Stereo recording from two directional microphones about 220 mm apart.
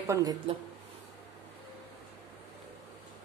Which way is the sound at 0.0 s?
15° right (ahead or behind).